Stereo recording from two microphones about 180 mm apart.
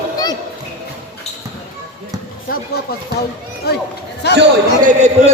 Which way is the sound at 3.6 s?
65° left (ahead or behind).